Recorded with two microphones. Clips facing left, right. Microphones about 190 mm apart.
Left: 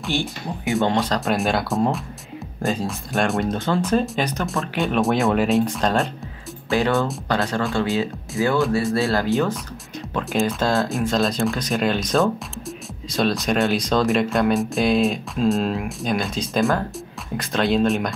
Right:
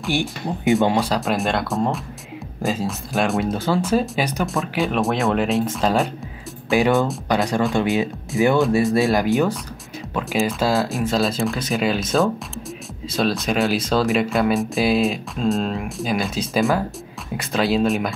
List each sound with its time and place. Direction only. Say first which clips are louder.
0.1 s speech: right 3 dB; 15° right (ahead or behind)
6.7 s speech: right 3 dB; 15° right (ahead or behind)
10.1 s speech: even; 5° right (ahead or behind)